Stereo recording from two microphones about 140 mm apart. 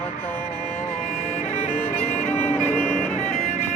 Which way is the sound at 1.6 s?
45° left (ahead or behind).